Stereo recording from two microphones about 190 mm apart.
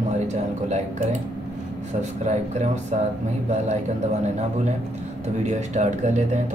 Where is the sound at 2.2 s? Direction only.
35° right (ahead or behind).